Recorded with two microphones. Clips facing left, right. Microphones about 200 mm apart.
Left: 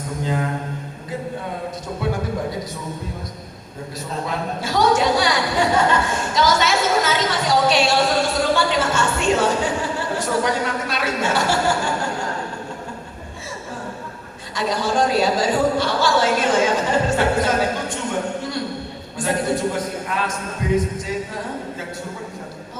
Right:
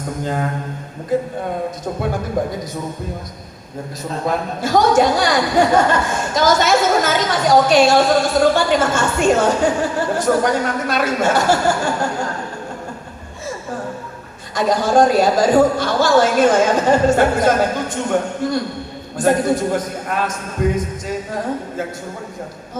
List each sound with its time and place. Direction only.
4.3 s a woman's voice: 45° right (ahead or behind)
14.5 s a woman's voice: 45° right (ahead or behind)